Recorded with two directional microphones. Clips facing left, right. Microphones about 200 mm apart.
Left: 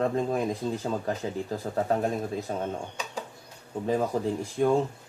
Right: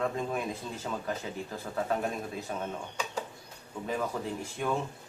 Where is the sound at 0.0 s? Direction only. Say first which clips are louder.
Left 6 dB; 35° left (ahead or behind).